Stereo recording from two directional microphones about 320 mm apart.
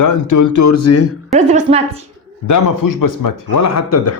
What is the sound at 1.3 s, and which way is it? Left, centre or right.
Speech, right.